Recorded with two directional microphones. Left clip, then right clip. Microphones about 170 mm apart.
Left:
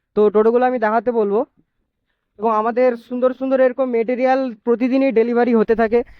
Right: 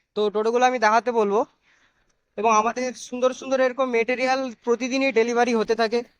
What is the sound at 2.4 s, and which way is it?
Speech, 45° left (ahead or behind).